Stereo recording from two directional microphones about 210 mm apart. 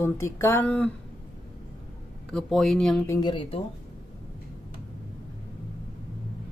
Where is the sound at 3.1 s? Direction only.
20° left (ahead or behind).